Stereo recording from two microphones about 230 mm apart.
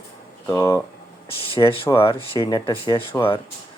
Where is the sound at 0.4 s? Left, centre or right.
Centre.